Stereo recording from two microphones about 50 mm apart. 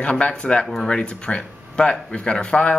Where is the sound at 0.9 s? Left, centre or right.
Left.